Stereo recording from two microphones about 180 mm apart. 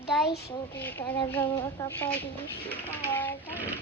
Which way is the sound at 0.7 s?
10° left (ahead or behind).